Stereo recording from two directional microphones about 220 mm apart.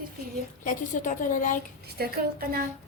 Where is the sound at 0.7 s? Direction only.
35° left (ahead or behind).